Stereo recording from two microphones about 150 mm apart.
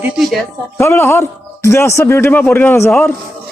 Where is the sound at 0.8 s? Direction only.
20° left (ahead or behind).